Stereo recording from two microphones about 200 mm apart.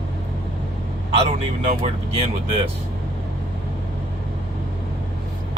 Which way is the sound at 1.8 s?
30° right (ahead or behind).